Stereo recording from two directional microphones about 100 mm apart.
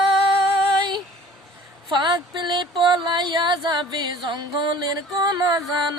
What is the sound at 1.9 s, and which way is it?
Speech, 50° right (ahead or behind).